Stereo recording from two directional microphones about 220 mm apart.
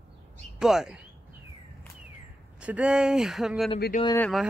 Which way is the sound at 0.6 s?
Centre (ahead or behind).